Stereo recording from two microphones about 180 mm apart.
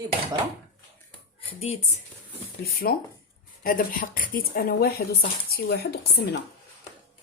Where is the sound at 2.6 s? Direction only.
55° left (ahead or behind).